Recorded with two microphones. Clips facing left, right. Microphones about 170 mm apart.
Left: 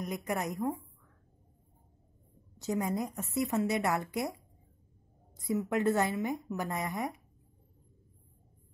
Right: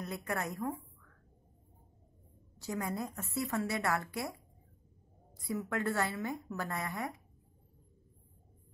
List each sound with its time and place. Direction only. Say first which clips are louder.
0.0 s a woman's voice: left 3 dB; 15° left (ahead or behind)
2.6 s a woman's voice: left 5 dB; 20° left (ahead or behind)